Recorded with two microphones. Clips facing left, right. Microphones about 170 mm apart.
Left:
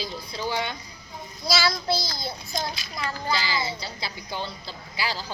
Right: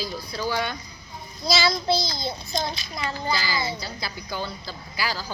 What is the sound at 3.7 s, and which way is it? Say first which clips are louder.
Speech: right 2 dB; 25° left (ahead or behind).